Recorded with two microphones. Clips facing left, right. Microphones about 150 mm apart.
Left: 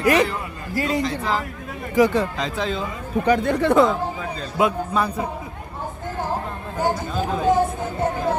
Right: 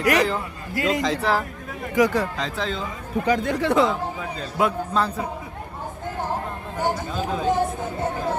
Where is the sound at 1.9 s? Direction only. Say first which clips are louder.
Left 2 dB; 25° left (ahead or behind).